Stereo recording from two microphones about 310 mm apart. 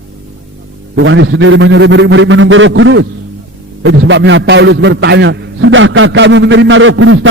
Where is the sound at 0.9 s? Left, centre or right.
Right.